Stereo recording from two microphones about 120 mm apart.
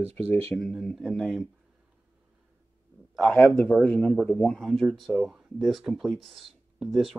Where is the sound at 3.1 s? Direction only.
5° left (ahead or behind).